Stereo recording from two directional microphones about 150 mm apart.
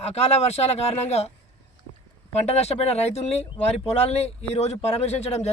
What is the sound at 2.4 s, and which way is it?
A man's voice, 45° left (ahead or behind).